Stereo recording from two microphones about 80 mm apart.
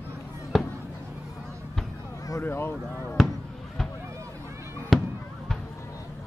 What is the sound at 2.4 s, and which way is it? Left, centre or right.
Speech, left.